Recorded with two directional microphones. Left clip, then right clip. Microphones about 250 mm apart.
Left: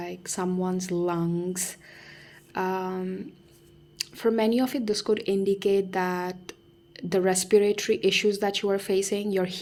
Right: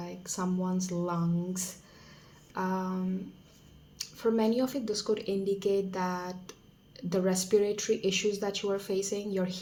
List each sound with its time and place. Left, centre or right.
0.3 s speech: left
4.2 s speech: left